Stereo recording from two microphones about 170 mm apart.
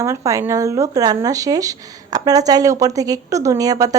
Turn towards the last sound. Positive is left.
turn(degrees=-20)  # may be behind; listen again after turning